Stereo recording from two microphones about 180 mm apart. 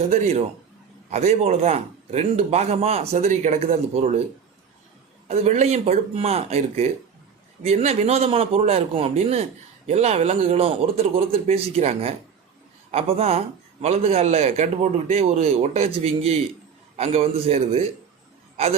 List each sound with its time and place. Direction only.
0.0 s a man's voice: 35° right (ahead or behind)
5.3 s a man's voice: 40° right (ahead or behind)